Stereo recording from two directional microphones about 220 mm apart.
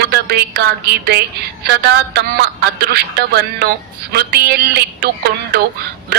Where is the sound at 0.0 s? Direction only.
45° right (ahead or behind).